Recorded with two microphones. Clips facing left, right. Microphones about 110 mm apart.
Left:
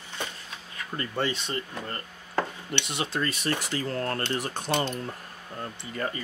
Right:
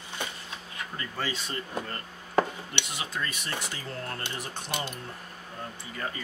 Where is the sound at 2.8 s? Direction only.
70° left (ahead or behind); by 3.5 s 85° left.